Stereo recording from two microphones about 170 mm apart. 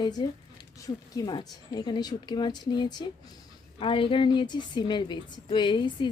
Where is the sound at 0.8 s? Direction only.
20° left (ahead or behind).